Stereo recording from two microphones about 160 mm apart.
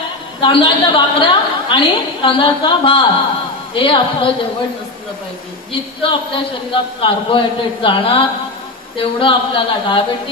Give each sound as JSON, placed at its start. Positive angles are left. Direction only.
{"t": 0.4, "sound": "a woman's voice", "side_deg": 35}
{"t": 5.7, "sound": "a woman's voice", "side_deg": 35}